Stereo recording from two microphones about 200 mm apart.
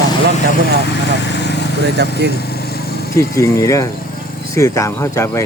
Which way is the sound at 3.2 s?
15° left (ahead or behind).